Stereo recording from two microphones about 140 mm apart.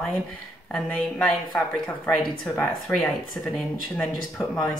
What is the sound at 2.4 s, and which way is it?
Speech, 15° left (ahead or behind).